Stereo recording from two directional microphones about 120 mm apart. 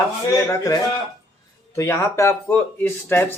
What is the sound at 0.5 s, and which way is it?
Speech, 25° left (ahead or behind).